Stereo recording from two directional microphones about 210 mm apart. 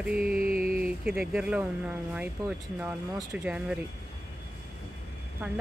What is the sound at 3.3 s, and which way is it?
Speech, 5° right (ahead or behind).